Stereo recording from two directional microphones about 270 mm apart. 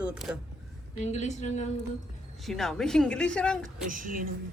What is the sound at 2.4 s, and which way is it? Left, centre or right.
Speech, centre.